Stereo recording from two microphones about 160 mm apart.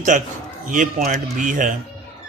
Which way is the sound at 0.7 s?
55° right (ahead or behind).